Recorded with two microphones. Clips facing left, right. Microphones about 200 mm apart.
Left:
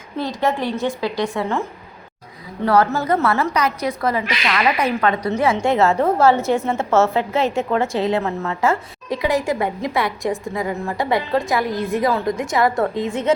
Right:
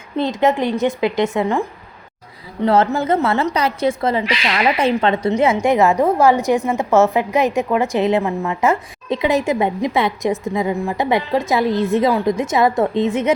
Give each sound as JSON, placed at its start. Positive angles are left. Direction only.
{"t": 0.2, "sound": "a woman's voice", "side_deg": -20}
{"t": 2.6, "sound": "a woman's voice", "side_deg": -25}